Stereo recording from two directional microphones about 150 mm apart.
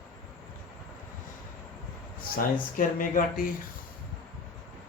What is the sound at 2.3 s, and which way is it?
Speech, 65° left (ahead or behind).